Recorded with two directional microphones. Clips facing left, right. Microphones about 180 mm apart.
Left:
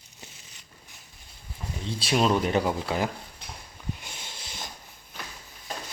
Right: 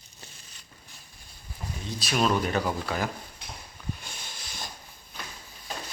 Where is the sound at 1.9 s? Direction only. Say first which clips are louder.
Left 2 dB; 25° left (ahead or behind).